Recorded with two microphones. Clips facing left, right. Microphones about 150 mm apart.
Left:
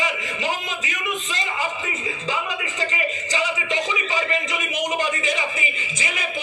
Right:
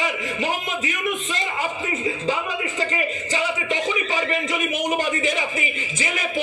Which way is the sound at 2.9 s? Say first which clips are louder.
Right 1 dB; 50° right (ahead or behind).